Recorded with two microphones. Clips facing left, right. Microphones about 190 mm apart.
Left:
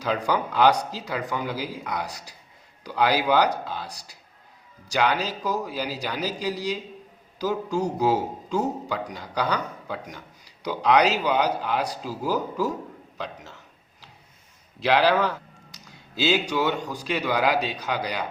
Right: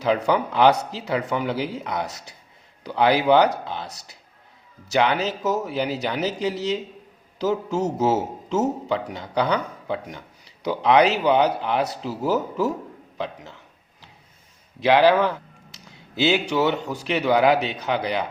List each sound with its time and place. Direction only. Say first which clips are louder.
0.0 s a man's voice: right 4 dB; 20° right (ahead or behind)
14.8 s a man's voice: right 4 dB; 20° right (ahead or behind)